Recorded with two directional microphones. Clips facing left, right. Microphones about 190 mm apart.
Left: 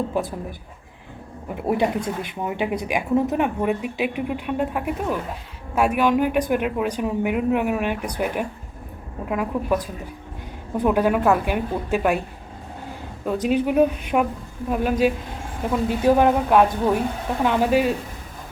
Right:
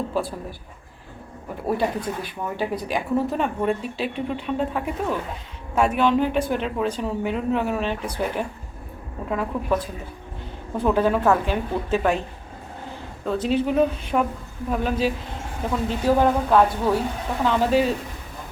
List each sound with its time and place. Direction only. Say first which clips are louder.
0.1 s speech: left 1 dB; 20° left (ahead or behind)
1.6 s speech: left 2 dB; 20° left (ahead or behind)
10.8 s speech: left 1 dB; 10° left (ahead or behind)
13.2 s speech: left 1 dB; 15° left (ahead or behind)